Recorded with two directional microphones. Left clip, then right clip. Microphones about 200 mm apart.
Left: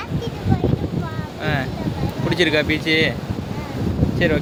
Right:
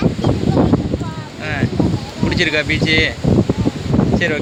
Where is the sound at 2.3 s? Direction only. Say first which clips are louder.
Right 2 dB; 15° left (ahead or behind).